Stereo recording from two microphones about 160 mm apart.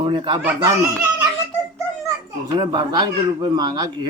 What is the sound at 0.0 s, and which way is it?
Speech, 30° right (ahead or behind).